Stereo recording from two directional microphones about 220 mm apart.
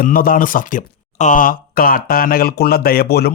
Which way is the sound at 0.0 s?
40° left (ahead or behind).